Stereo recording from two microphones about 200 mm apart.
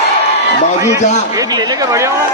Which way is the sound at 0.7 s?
15° right (ahead or behind).